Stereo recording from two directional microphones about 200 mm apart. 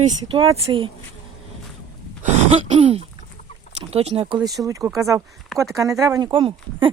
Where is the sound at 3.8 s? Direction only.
30° right (ahead or behind).